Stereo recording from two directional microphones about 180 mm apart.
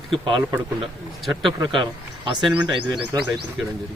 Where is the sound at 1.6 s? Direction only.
25° right (ahead or behind).